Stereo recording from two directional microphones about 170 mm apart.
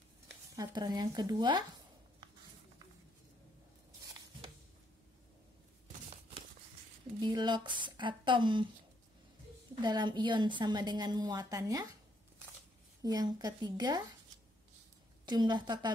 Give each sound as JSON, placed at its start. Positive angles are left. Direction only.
{"t": 0.6, "sound": "a woman's voice", "side_deg": -25}
{"t": 7.2, "sound": "a woman's voice", "side_deg": -25}
{"t": 9.8, "sound": "a woman's voice", "side_deg": -25}
{"t": 13.0, "sound": "a woman's voice", "side_deg": -25}
{"t": 15.2, "sound": "a woman's voice", "side_deg": -25}